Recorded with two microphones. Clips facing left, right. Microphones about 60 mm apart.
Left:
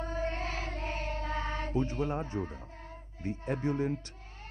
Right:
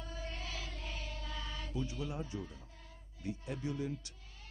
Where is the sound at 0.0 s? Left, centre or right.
Left.